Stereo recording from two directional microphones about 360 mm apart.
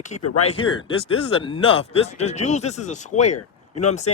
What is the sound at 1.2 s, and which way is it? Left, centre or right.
Speech, centre.